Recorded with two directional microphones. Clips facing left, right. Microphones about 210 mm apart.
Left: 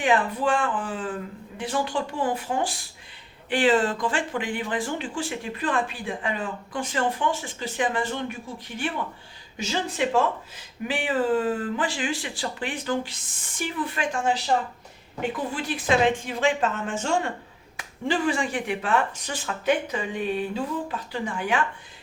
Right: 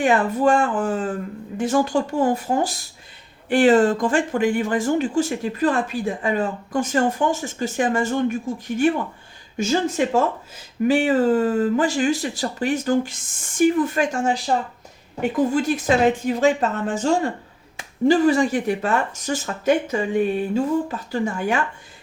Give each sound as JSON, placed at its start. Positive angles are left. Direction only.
{"t": 0.0, "sound": "speech", "side_deg": -45}